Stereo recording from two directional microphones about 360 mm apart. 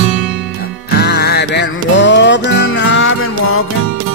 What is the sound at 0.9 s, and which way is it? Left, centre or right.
Music, left.